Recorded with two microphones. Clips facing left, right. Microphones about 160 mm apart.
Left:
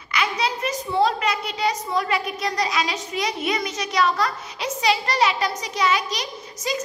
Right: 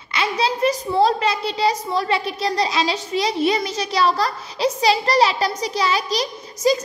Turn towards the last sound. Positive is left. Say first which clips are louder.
# right 9 dB
turn(degrees=-35)  # may be behind; listen again after turning